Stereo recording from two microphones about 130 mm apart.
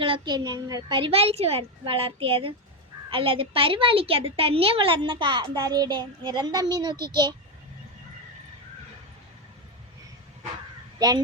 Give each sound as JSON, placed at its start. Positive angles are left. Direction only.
{"t": 0.0, "sound": "a woman's voice", "side_deg": -35}